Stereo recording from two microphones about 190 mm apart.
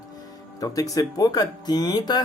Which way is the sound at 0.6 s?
20° left (ahead or behind).